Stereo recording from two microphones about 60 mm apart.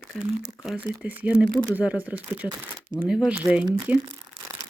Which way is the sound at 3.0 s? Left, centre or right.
Centre.